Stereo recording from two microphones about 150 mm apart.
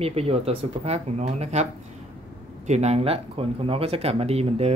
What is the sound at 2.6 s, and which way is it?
Speech, 45° right (ahead or behind).